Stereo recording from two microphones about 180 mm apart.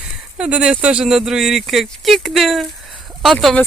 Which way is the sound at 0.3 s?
5° right (ahead or behind).